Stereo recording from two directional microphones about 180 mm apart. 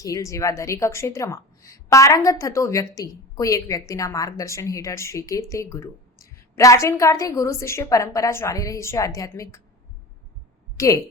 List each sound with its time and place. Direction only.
0.0 s a woman's voice: 20° left (ahead or behind)
10.8 s speech: 15° left (ahead or behind)